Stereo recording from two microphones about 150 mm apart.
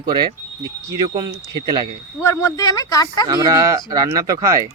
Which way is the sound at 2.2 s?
20° left (ahead or behind).